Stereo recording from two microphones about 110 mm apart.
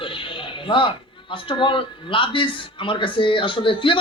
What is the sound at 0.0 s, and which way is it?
Speech, 50° left (ahead or behind).